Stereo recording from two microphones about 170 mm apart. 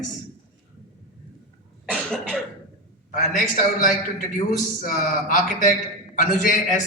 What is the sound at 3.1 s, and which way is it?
A man's voice, 50° left (ahead or behind).